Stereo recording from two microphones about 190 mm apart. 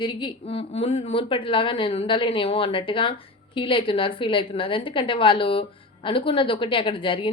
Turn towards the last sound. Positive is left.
turn(degrees=25)  # may be behind; listen again after turning